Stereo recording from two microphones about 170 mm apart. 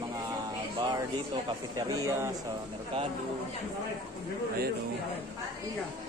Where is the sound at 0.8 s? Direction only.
25° right (ahead or behind).